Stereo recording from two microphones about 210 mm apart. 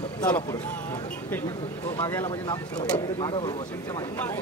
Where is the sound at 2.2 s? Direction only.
20° left (ahead or behind).